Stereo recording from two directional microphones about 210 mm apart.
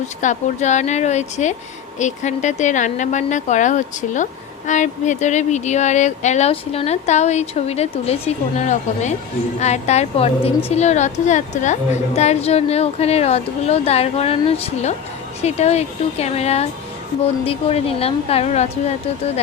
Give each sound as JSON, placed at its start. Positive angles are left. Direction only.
{"t": 0.2, "sound": "a woman's voice", "side_deg": 35}